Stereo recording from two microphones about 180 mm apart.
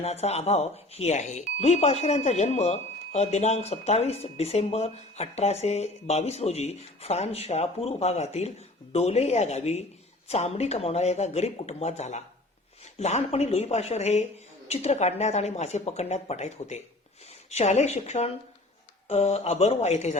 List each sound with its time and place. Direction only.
0.0 s speech: 35° left (ahead or behind)